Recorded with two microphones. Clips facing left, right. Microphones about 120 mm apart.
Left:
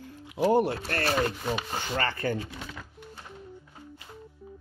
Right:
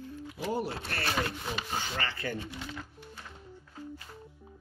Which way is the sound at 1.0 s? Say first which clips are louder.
Left 5 dB; 40° left (ahead or behind).